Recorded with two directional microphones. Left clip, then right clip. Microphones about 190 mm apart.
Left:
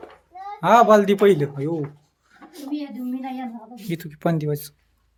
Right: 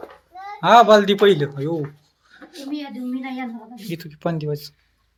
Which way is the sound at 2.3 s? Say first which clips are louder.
Right 2 dB; 10° left (ahead or behind).